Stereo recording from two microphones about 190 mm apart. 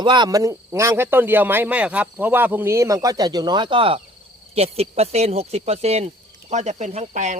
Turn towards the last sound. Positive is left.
turn(degrees=-40)  # may be behind; listen again after turning